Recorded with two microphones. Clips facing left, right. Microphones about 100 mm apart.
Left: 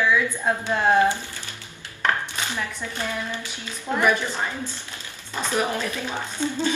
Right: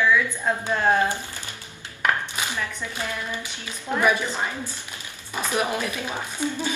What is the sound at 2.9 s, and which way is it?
Speech, 15° right (ahead or behind).